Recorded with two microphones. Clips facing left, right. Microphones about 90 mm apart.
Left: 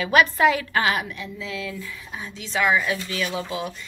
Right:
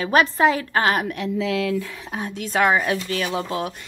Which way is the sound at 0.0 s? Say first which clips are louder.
Right 1 dB; 35° right (ahead or behind).